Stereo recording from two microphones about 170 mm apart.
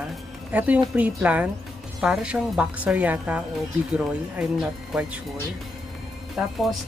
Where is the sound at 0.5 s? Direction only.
10° right (ahead or behind).